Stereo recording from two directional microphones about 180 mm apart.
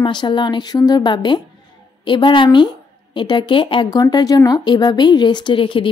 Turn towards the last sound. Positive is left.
turn(degrees=30)  # may be behind; listen again after turning